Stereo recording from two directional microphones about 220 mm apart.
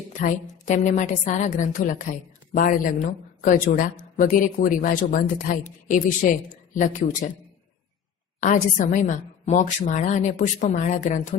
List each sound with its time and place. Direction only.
0.2 s a woman's voice: 35° left (ahead or behind)
8.4 s a woman's voice: 40° left (ahead or behind)